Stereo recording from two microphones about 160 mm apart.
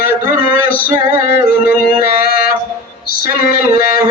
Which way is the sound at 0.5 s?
10° right (ahead or behind).